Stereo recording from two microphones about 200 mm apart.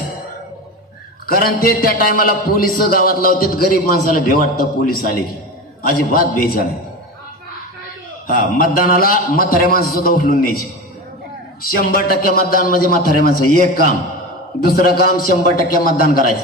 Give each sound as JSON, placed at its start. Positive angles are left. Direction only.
{"t": 1.2, "sound": "a man's voice", "side_deg": 45}
{"t": 8.3, "sound": "a man's voice", "side_deg": 45}
{"t": 11.7, "sound": "a man's voice", "side_deg": 45}